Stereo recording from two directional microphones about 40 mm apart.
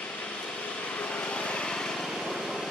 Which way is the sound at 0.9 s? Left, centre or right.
Left.